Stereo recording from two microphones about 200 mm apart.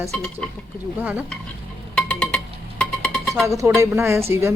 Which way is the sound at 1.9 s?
5° left (ahead or behind).